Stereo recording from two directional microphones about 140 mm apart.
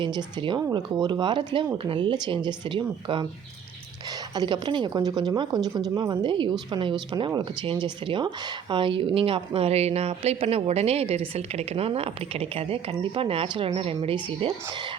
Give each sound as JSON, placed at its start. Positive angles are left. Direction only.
{"t": 0.0, "sound": "speech", "side_deg": -35}
{"t": 4.4, "sound": "a woman's voice", "side_deg": -30}